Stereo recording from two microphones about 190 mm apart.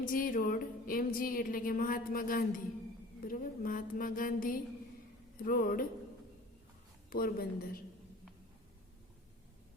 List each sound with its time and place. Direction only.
0.0 s a woman's voice: 50° left (ahead or behind)
7.1 s a woman's voice: 50° left (ahead or behind)